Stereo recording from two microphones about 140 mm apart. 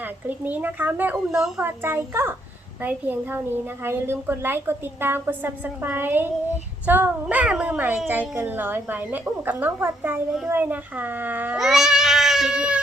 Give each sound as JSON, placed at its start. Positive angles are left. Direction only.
{"t": 0.0, "sound": "a child's voice", "side_deg": -10}
{"t": 1.6, "sound": "a child's voice", "side_deg": -15}